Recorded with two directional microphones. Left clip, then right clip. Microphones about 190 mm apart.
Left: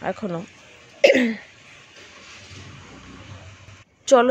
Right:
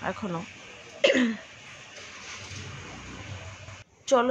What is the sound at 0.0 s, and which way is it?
Dishes, 25° left (ahead or behind).